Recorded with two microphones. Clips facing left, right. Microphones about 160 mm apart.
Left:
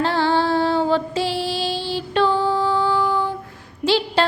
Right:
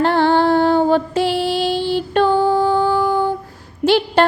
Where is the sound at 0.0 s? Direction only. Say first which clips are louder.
Right 5 dB; 55° right (ahead or behind).